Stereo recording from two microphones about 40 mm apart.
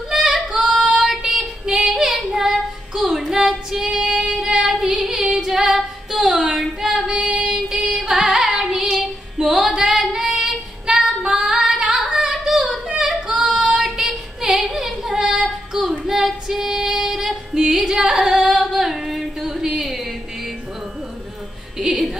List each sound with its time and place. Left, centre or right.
0.1 s female singing: centre
4.6 s child singing: centre
5.3 s female singing: centre
7.7 s carnatic music: centre
8.8 s female singing: centre
9.8 s female singing: centre
12.8 s singing: centre
13.8 s a sound: centre
15.1 s female singing: centre
15.7 s child singing: centre
16.4 s female singing: centre
18.8 s female singing: centre
19.4 s a sound: centre
21.7 s music: centre